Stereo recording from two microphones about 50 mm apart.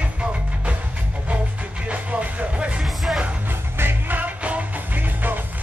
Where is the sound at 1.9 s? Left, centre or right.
Right.